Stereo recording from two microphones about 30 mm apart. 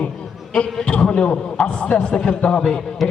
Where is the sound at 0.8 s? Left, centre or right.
Left.